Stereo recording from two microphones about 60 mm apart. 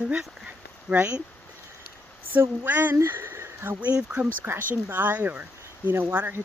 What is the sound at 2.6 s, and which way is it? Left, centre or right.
Speech, right.